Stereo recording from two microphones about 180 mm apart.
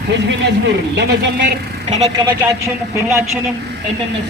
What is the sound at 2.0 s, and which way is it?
Speech, 20° right (ahead or behind).